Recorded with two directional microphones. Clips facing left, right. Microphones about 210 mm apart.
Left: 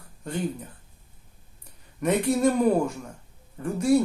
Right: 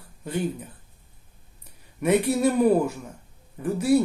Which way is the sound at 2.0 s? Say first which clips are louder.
Right 1 dB; 5° right (ahead or behind).